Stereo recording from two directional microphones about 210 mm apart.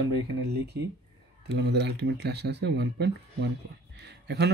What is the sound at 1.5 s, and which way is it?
Speech, 50° right (ahead or behind).